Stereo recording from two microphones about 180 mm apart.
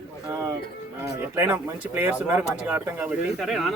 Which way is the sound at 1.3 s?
10° right (ahead or behind).